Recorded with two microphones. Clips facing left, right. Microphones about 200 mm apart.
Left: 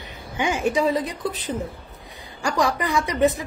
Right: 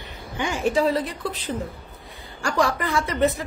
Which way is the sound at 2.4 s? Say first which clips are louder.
Even; 20° left (ahead or behind).